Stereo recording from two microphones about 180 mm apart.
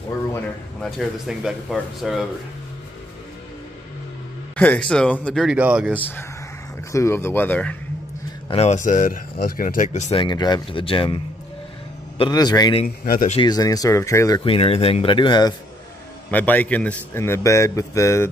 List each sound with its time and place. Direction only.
0.8 s speech: centre (ahead or behind)
4.6 s speech: 5° left (ahead or behind)
5.9 s a man's voice: 10° left (ahead or behind)
8.5 s speech: 40° left (ahead or behind)
10.2 s speech: 25° left (ahead or behind)
12.2 s speech: 20° left (ahead or behind)
12.8 s speech: 55° left (ahead or behind)
13.3 s speech: 25° left (ahead or behind)
14.4 s speech: 30° left (ahead or behind)
16.3 s a man's voice: 10° left (ahead or behind)